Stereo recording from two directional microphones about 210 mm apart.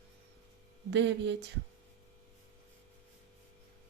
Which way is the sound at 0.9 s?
60° right (ahead or behind).